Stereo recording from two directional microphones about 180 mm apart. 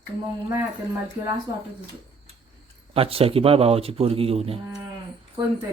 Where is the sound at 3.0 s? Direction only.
30° right (ahead or behind).